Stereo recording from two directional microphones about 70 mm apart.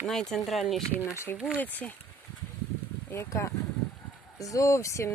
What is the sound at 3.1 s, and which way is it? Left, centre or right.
Speech, left.